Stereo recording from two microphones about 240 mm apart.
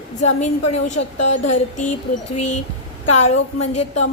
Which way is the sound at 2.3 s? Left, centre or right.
Left.